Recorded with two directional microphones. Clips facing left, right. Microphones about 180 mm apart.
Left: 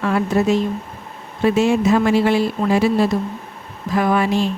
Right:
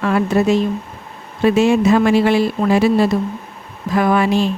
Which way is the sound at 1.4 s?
80° right.